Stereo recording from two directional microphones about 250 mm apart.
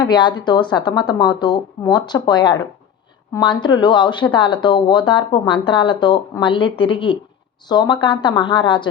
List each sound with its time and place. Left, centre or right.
0.0 s speech: centre